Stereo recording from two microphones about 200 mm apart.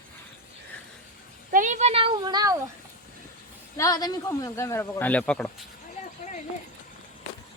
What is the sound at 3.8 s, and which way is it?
Speech, 20° left (ahead or behind).